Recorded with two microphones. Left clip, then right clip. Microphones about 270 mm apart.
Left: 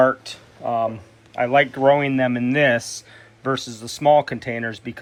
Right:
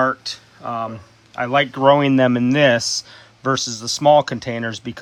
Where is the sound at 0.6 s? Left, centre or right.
Right.